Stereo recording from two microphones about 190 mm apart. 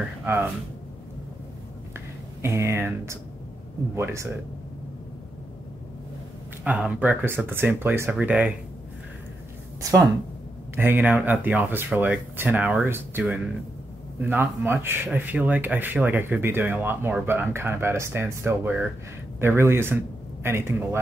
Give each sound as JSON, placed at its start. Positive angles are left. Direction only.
{"t": 0.2, "sound": "speech", "side_deg": -10}
{"t": 2.0, "sound": "speech", "side_deg": -15}
{"t": 6.6, "sound": "speech", "side_deg": -5}
{"t": 9.8, "sound": "a woman's voice", "side_deg": -15}